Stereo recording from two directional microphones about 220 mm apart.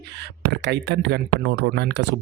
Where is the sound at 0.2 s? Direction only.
50° right (ahead or behind).